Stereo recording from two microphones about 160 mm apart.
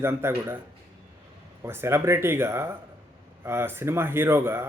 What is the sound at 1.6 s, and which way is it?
Speech, 15° right (ahead or behind).